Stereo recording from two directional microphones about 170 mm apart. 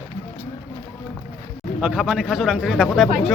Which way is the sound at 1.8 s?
5° right (ahead or behind).